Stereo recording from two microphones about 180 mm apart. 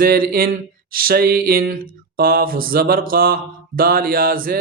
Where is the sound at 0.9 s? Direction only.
55° right (ahead or behind).